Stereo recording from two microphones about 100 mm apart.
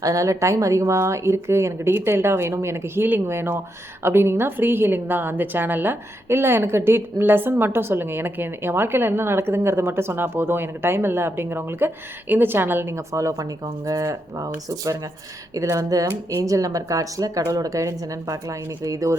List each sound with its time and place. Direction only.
0.0 s a woman's voice: 30° right (ahead or behind)